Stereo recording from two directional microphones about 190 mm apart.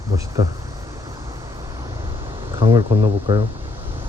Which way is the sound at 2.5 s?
25° right (ahead or behind).